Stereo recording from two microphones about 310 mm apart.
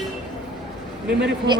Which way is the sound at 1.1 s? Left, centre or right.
Right.